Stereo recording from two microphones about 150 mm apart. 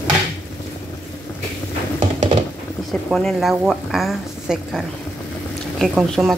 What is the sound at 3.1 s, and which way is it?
A woman's voice, centre (ahead or behind).